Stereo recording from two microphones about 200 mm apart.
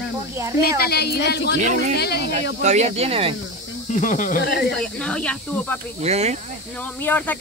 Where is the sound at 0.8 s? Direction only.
50° left (ahead or behind).